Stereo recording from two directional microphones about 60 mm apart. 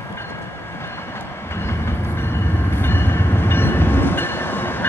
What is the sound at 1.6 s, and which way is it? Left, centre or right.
Train, left.